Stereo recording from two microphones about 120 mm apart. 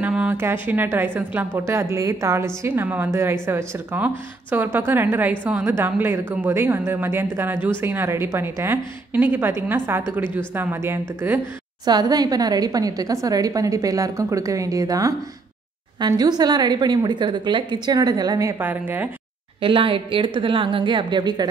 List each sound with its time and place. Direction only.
0.0 s a woman's voice: 10° right (ahead or behind)
11.8 s a woman's voice: 35° right (ahead or behind)
18.6 s a woman's voice: 15° right (ahead or behind)
19.6 s a woman's voice: 50° right (ahead or behind)